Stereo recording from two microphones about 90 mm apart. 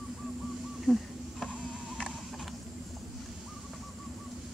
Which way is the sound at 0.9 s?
Centre (ahead or behind).